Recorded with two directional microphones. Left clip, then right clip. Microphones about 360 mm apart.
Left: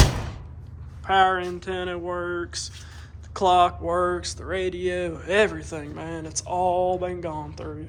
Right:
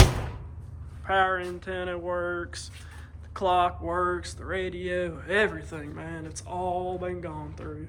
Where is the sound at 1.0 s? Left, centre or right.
Centre.